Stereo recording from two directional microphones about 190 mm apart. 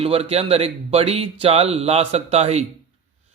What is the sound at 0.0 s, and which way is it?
Speech, 30° right (ahead or behind).